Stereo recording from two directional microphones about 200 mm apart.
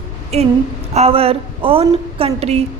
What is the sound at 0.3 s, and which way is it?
A woman's voice, 30° right (ahead or behind).